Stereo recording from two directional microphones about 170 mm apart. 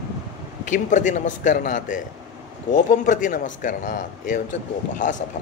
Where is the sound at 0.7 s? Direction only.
50° left (ahead or behind).